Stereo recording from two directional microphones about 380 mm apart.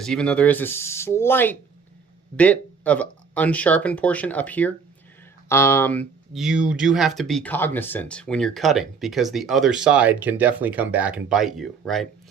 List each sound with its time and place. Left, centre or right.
0.0 s speech: centre